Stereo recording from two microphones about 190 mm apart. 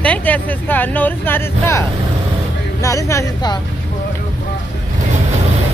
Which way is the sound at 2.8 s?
15° left (ahead or behind).